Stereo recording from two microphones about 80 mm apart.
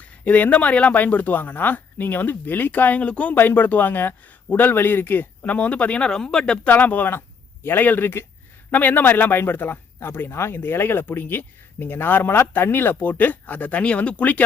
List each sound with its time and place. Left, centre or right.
0.0 s speech: centre
6.7 s speech: left